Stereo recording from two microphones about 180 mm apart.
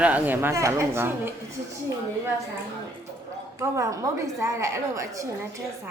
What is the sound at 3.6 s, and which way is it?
Speech, 15° right (ahead or behind).